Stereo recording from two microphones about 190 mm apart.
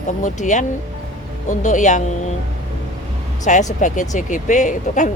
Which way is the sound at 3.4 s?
40° left (ahead or behind).